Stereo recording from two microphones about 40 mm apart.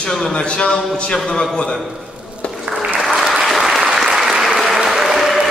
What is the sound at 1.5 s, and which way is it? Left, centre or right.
Speech, centre.